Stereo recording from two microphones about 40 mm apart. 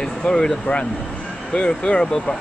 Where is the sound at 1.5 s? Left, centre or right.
Left.